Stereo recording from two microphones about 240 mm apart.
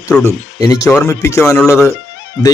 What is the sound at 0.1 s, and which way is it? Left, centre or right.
Speech, centre.